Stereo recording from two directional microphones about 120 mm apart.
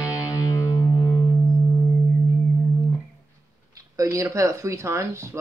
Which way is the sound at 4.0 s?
25° right (ahead or behind).